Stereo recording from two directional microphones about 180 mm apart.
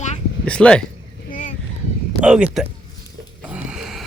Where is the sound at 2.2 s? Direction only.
5° right (ahead or behind).